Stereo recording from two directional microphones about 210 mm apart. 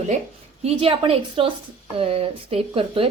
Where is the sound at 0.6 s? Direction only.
25° right (ahead or behind).